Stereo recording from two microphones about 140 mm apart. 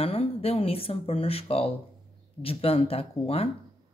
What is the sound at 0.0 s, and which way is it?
Speech, 45° left (ahead or behind).